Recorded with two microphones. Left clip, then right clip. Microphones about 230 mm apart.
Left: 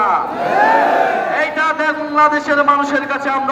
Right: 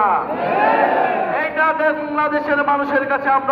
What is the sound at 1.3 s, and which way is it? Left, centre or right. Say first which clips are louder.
A man's voice: left 1 dB; left.